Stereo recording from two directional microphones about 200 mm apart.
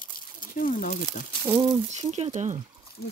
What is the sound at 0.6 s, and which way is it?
Speech, 45° left (ahead or behind).